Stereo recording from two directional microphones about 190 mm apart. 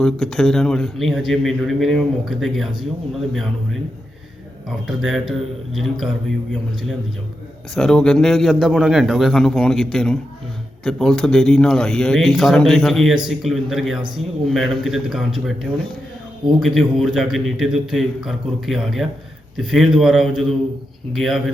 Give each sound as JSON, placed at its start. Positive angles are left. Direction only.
{"t": 0.0, "sound": "a man's voice", "side_deg": 0}
{"t": 4.9, "sound": "a man's voice", "side_deg": 0}